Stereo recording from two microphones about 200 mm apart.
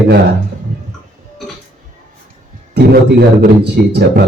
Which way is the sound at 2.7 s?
50° right (ahead or behind).